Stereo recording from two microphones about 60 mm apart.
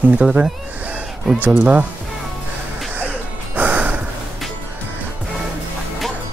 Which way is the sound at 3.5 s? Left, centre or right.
Right.